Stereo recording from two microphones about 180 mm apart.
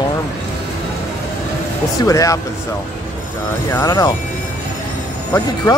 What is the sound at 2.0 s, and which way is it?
Speech, 20° left (ahead or behind).